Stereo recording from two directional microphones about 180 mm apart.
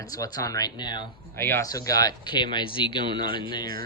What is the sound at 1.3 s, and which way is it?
Speech, 15° left (ahead or behind).